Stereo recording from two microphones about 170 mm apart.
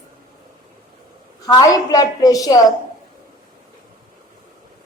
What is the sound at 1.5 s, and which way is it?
A woman's voice, 20° left (ahead or behind).